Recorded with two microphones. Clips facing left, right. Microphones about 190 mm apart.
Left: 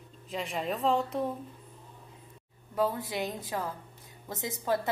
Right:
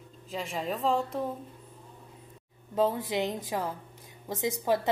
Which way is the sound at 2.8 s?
20° right (ahead or behind).